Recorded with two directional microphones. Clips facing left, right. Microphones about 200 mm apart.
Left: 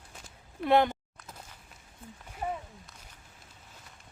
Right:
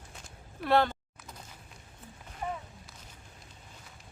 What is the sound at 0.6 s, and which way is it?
Speech, 20° left (ahead or behind).